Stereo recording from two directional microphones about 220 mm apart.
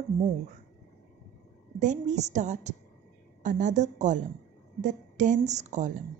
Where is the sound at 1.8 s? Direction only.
35° right (ahead or behind).